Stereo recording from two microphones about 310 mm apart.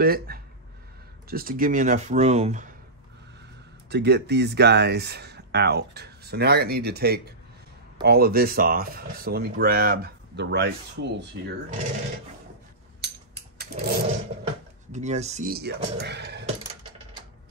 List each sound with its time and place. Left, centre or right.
0.0 s speech: right
3.9 s speech: right
13.0 s a sound: right
14.9 s speech: right